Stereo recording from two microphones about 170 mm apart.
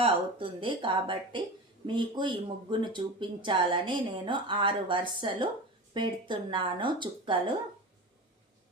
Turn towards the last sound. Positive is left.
turn(degrees=-30)  # may be behind; listen again after turning